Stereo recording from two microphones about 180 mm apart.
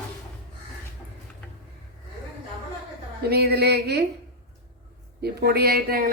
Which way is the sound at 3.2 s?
60° right (ahead or behind).